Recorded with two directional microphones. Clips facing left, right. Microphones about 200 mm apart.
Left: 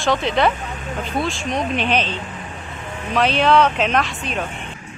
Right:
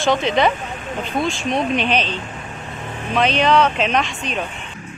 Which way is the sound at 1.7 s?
10° left (ahead or behind).